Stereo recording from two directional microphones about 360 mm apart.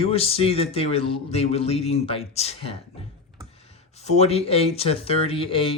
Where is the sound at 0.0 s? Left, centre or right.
Centre.